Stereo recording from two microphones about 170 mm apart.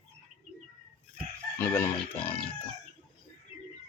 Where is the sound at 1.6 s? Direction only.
10° left (ahead or behind).